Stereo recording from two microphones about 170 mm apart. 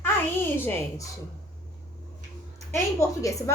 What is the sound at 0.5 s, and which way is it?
Speech, 10° left (ahead or behind).